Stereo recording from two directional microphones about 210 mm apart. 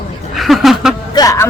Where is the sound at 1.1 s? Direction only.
15° left (ahead or behind).